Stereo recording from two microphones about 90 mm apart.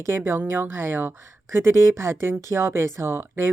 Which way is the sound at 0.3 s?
25° right (ahead or behind).